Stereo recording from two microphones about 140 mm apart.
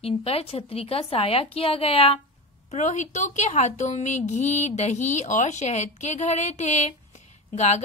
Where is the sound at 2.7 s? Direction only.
55° left (ahead or behind).